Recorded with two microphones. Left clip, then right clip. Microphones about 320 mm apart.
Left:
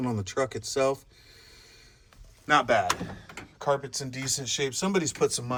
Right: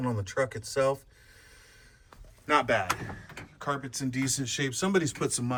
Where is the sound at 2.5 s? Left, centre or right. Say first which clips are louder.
Left 3 dB; centre.